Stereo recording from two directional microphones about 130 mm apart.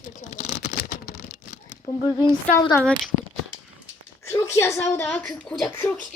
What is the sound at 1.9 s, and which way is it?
Speech, 25° left (ahead or behind).